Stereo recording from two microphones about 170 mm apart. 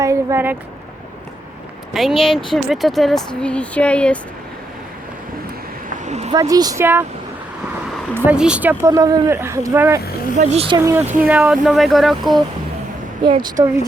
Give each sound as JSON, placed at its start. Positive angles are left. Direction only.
{"t": 0.0, "sound": "a sound", "side_deg": -15}
{"t": 1.9, "sound": "speech", "side_deg": 0}
{"t": 6.1, "sound": "a sound", "side_deg": -40}
{"t": 6.3, "sound": "speech", "side_deg": -20}
{"t": 8.1, "sound": "speech", "side_deg": -10}
{"t": 8.9, "sound": "speech", "side_deg": -20}
{"t": 10.3, "sound": "a woman's voice", "side_deg": -35}
{"t": 10.8, "sound": "speech", "side_deg": -15}
{"t": 11.3, "sound": "speech", "side_deg": -5}
{"t": 13.2, "sound": "speech", "side_deg": -30}